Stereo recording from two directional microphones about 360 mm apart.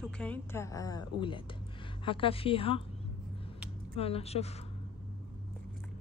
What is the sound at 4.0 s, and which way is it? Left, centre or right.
Speech, centre.